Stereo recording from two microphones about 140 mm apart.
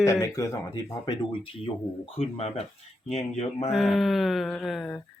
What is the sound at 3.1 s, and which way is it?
Speech, 50° left (ahead or behind).